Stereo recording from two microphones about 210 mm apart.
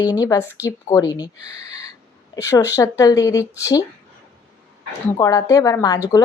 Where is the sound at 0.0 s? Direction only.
15° left (ahead or behind).